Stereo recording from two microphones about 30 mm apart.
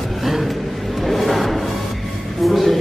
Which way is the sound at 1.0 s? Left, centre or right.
Centre.